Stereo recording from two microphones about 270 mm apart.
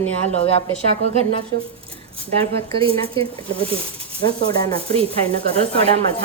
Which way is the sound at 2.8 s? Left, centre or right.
Right.